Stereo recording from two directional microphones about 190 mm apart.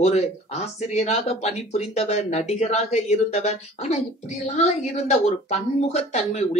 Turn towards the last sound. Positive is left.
turn(degrees=35)  # may be behind; listen again after turning